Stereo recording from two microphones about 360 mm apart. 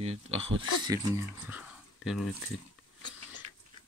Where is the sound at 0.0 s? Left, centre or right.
Centre.